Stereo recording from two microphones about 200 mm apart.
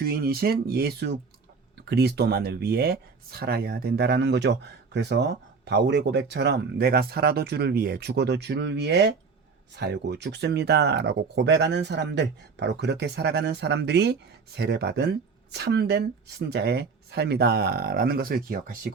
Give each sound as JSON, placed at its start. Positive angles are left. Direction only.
{"t": 0.0, "sound": "speech", "side_deg": -50}